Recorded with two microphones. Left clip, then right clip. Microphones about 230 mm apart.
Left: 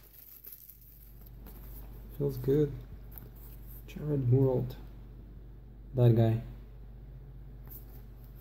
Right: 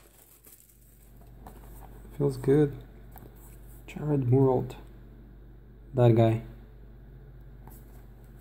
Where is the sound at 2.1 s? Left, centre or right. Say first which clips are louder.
Right 5 dB; right.